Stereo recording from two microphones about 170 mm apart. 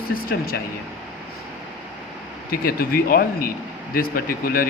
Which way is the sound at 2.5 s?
60° left (ahead or behind).